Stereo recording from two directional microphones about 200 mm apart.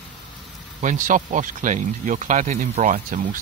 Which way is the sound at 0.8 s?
40° right (ahead or behind).